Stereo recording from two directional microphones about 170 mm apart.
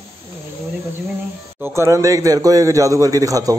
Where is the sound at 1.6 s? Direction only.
15° right (ahead or behind).